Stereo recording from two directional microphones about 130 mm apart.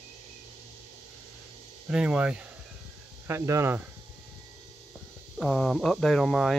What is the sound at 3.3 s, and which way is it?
Speech, 20° right (ahead or behind).